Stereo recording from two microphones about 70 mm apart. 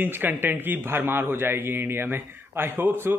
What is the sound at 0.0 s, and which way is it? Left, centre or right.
A man's voice, right.